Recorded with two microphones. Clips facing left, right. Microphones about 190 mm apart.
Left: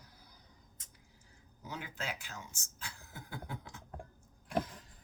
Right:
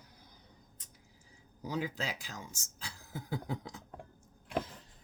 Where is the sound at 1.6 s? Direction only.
35° right (ahead or behind).